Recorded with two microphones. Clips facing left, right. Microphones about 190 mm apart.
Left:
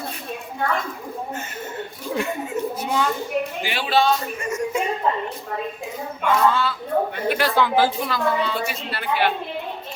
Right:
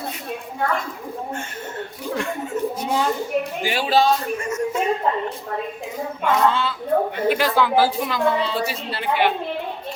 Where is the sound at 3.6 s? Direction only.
40° right (ahead or behind).